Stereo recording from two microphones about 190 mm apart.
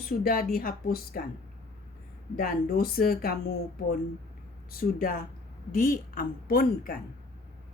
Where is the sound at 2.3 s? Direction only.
55° left (ahead or behind).